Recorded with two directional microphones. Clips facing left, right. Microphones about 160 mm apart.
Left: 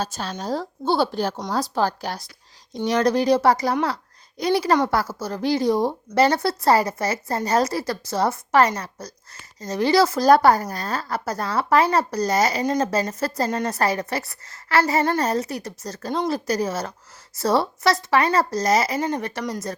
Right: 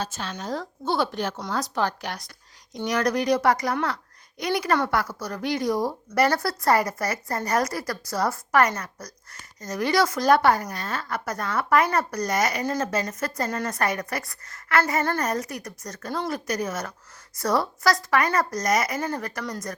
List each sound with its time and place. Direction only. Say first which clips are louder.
0.0 s a woman's voice: left 4 dB; 40° left (ahead or behind)